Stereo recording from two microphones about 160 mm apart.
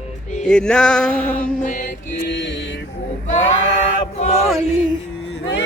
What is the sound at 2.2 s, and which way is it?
Mantra, 90° left.